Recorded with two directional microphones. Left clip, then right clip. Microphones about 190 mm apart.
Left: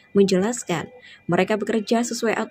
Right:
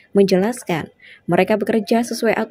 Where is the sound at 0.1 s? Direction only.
20° right (ahead or behind).